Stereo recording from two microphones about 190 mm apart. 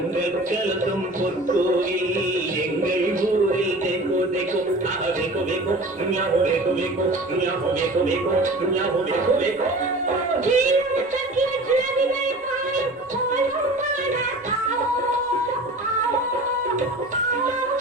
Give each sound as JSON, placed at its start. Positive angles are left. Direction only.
{"t": 2.8, "sound": "music", "side_deg": -45}
{"t": 10.4, "sound": "speech", "side_deg": -40}